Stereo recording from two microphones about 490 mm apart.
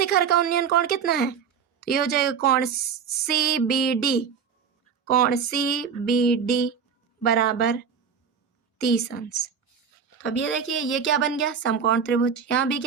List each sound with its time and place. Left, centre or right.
0.0 s speech: centre
8.8 s speech: centre